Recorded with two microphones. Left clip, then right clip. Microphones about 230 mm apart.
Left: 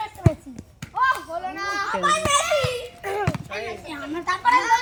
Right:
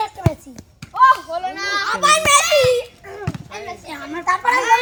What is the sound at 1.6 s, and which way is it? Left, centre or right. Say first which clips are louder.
Children playing: right 6 dB; right.